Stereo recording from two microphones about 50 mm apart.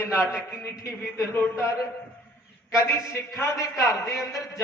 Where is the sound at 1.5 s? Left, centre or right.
Left.